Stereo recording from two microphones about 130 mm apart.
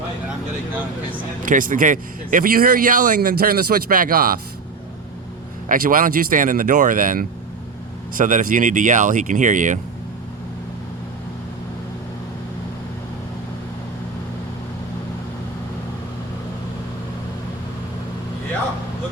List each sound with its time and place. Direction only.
1.4 s speech: 90° right
5.6 s speech: 90° right